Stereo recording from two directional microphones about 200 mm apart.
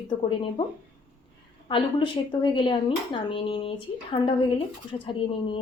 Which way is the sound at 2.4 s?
25° left (ahead or behind).